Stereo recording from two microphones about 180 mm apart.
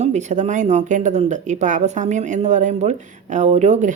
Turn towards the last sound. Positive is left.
turn(degrees=-40)  # may be behind; listen again after turning